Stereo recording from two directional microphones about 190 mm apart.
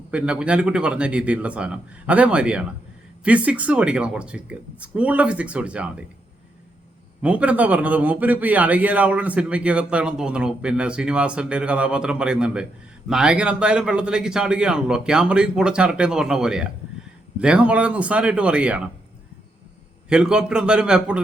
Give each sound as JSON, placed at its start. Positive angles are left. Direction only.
{"t": 0.1, "sound": "a man's voice", "side_deg": -5}
{"t": 7.2, "sound": "a man's voice", "side_deg": -5}
{"t": 20.1, "sound": "a man's voice", "side_deg": -5}